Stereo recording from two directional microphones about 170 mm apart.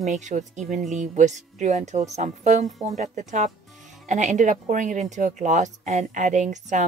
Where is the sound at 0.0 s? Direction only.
45° right (ahead or behind).